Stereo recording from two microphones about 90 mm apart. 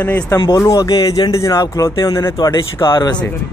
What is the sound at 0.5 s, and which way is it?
Speech, 40° left (ahead or behind).